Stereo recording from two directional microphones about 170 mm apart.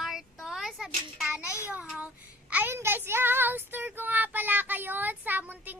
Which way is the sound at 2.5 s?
10° right (ahead or behind).